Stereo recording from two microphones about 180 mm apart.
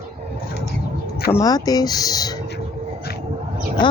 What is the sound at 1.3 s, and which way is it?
Speech, 20° left (ahead or behind).